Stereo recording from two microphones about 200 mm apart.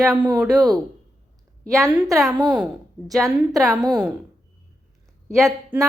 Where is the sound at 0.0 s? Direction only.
15° right (ahead or behind).